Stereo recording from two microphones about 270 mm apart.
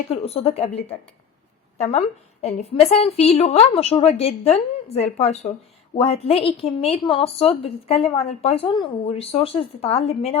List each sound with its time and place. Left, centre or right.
0.1 s a woman's voice: left
1.8 s a woman's voice: left